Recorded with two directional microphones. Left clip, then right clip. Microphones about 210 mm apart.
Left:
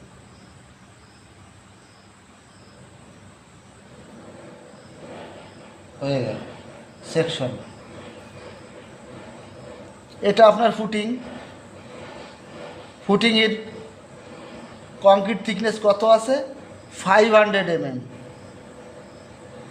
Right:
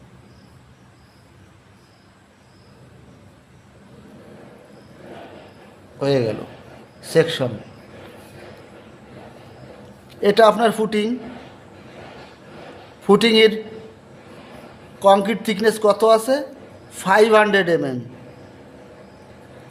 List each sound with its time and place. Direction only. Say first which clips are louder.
6.0 s a man's voice: right 6 dB; 30° right (ahead or behind)
10.2 s speech: right 1 dB; 20° right (ahead or behind)
13.1 s speech: right 5 dB; 20° right (ahead or behind)
14.9 s speech: right 1 dB; 20° right (ahead or behind)